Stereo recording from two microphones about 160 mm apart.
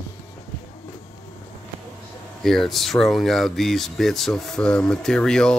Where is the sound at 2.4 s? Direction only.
Centre (ahead or behind).